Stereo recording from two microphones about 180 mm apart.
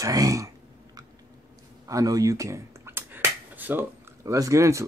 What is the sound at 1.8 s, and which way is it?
Finger snapping, 20° right (ahead or behind).